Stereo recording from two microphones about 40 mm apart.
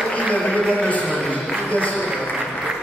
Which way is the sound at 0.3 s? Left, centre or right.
Left.